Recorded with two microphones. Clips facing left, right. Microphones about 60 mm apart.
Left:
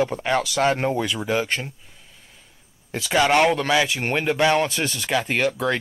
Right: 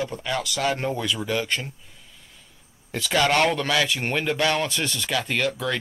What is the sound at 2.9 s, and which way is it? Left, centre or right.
Speech, centre.